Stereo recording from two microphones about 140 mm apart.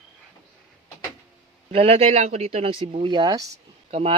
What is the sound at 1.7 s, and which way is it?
Speech, 45° right (ahead or behind).